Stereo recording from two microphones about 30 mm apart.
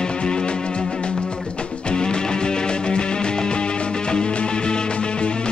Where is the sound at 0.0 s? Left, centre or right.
Left.